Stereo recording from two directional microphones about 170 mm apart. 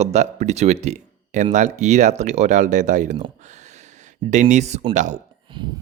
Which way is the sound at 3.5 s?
45° right (ahead or behind).